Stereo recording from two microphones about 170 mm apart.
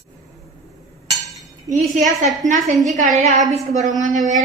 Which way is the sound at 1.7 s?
45° right (ahead or behind).